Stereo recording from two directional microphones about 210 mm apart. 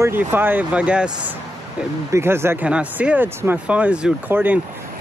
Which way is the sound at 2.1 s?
10° right (ahead or behind).